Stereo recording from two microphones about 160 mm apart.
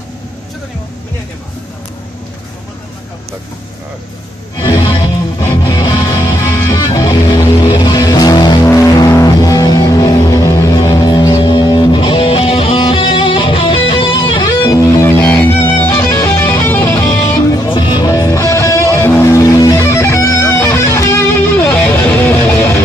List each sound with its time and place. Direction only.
4.6 s music: 25° left (ahead or behind)